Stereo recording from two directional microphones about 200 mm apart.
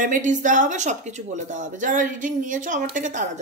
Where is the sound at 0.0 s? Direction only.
40° right (ahead or behind).